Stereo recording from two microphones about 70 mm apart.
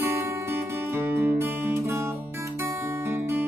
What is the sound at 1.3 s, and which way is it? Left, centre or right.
Guitar, right.